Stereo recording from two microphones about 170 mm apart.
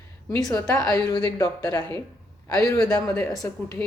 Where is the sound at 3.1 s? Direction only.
5° left (ahead or behind).